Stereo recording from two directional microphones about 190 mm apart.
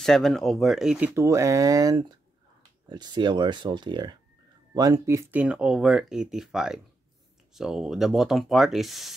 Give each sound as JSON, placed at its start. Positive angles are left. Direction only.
{"t": 0.0, "sound": "speech", "side_deg": 0}